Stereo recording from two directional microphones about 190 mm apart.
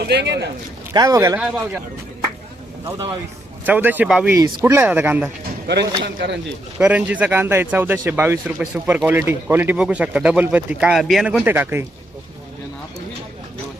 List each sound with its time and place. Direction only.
0.0 s a man's voice: 60° right (ahead or behind)
0.9 s speech: 15° right (ahead or behind)
1.4 s speech: 5° right (ahead or behind)
3.7 s speech: 10° right (ahead or behind)
5.6 s a man's voice: 60° right (ahead or behind)
6.7 s speech: 5° right (ahead or behind)